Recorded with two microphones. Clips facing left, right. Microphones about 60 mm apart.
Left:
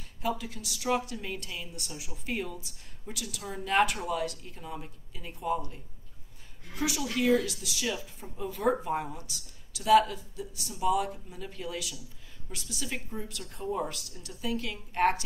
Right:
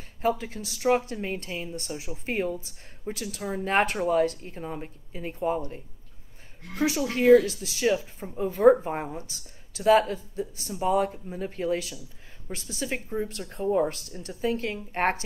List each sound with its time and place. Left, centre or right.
0.2 s speech: right
6.8 s speech: right